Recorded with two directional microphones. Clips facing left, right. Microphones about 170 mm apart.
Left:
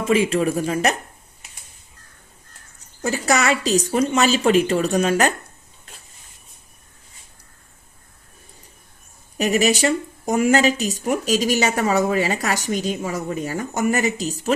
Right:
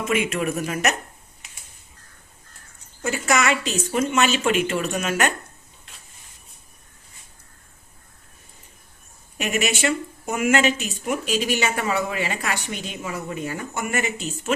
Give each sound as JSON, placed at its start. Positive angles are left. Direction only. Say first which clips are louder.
{"t": 0.0, "sound": "speech", "louder": "left 5 dB", "side_deg": 30}
{"t": 3.0, "sound": "speech", "louder": "left 2 dB", "side_deg": 35}
{"t": 9.4, "sound": "speech", "louder": "left 5 dB", "side_deg": 35}